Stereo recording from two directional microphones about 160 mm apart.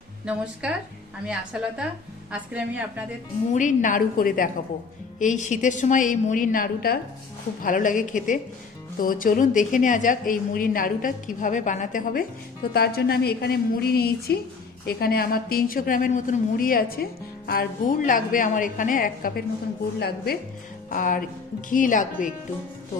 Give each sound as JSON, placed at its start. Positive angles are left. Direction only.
{"t": 0.3, "sound": "a woman's voice", "side_deg": -5}
{"t": 3.5, "sound": "a woman's voice", "side_deg": 50}
{"t": 5.2, "sound": "a woman's voice", "side_deg": 50}
{"t": 7.6, "sound": "a woman's voice", "side_deg": 55}
{"t": 12.7, "sound": "a woman's voice", "side_deg": 75}
{"t": 20.0, "sound": "a woman's voice", "side_deg": 80}
{"t": 20.9, "sound": "a woman's voice", "side_deg": 60}